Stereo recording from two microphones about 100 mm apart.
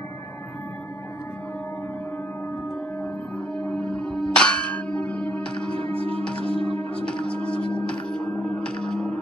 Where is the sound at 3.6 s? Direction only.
10° left (ahead or behind).